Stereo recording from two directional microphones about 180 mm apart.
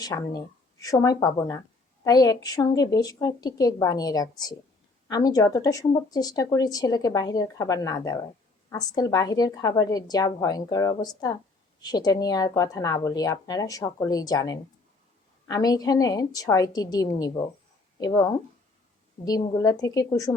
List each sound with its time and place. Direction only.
0.0 s speech: 20° left (ahead or behind)